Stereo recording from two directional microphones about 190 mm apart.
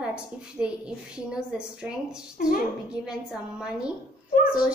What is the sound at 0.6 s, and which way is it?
Speech, 5° right (ahead or behind).